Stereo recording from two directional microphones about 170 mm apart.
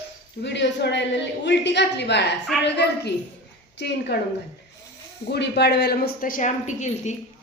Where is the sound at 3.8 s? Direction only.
80° left.